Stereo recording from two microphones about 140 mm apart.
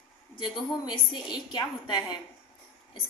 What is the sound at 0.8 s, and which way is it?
A woman's voice, 35° left (ahead or behind).